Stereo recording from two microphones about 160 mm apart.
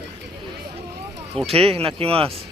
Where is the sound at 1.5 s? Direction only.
35° right (ahead or behind).